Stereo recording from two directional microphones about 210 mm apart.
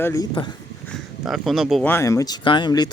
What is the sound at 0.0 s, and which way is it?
Speech, 15° left (ahead or behind).